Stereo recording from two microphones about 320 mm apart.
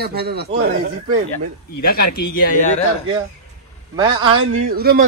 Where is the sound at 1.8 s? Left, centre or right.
Left.